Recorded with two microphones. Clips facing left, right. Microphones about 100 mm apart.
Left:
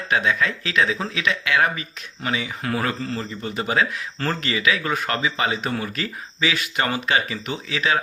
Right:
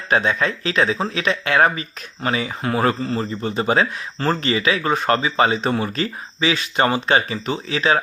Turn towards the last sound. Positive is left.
turn(degrees=-35)  # may be behind; listen again after turning